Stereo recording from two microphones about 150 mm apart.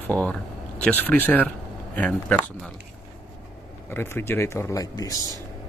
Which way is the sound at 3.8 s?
15° left (ahead or behind).